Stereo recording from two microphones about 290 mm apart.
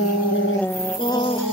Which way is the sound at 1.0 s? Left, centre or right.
Centre.